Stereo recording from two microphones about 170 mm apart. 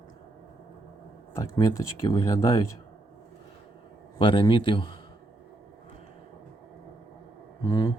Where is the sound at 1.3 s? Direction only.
15° left (ahead or behind).